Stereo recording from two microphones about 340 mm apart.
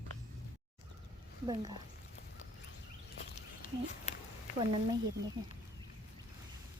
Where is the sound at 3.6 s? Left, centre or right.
Left.